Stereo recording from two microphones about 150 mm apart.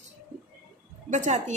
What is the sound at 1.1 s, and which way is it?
Speech, 55° right (ahead or behind).